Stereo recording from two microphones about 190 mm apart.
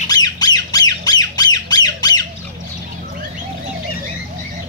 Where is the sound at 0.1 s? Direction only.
20° left (ahead or behind).